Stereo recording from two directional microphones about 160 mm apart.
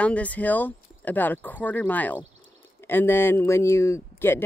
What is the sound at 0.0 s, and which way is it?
Speech, 10° left (ahead or behind).